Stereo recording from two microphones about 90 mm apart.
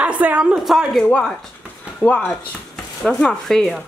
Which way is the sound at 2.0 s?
10° left (ahead or behind).